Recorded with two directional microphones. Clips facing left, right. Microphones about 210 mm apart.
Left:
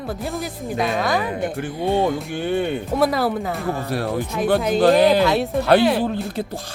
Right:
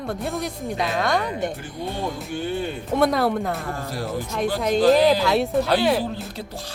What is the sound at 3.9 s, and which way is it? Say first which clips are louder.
Speech: left 5 dB; 65° left (ahead or behind).